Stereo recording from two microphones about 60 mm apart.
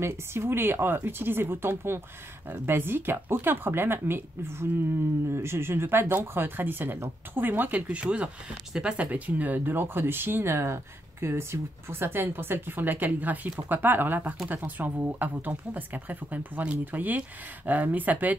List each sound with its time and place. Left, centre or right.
0.0 s speech: right